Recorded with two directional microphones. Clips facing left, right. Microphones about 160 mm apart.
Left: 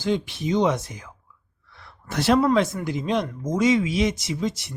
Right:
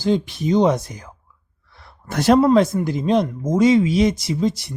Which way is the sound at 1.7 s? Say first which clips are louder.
Right 3 dB; 45° right (ahead or behind).